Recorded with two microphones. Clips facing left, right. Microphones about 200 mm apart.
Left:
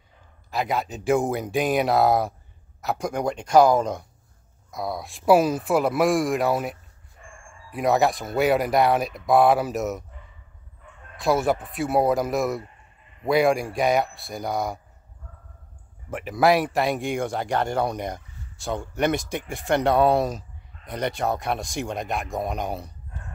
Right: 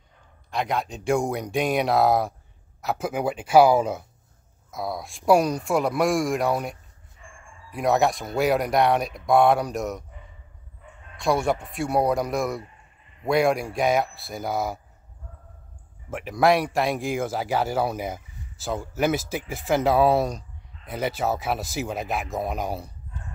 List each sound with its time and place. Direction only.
0.5 s speech: 5° left (ahead or behind)
7.2 s a sound: 50° left (ahead or behind)
7.7 s speech: centre (ahead or behind)
11.1 s speech: centre (ahead or behind)
16.1 s speech: centre (ahead or behind)